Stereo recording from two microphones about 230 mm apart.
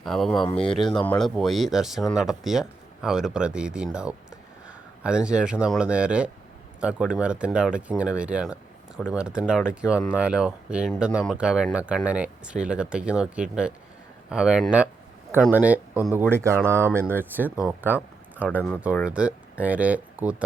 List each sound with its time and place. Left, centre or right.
0.0 s speech: centre
0.4 s speech: left
0.7 s speech: centre